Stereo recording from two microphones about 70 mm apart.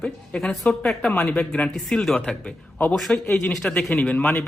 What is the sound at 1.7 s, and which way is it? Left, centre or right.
Speech, centre.